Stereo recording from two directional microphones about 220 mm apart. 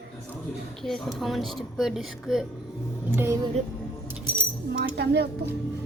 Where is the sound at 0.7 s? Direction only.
Centre (ahead or behind).